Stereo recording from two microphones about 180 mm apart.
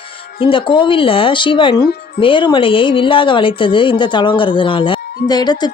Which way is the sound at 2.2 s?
25° left (ahead or behind).